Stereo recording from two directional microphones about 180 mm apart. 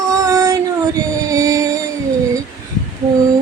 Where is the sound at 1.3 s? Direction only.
20° right (ahead or behind).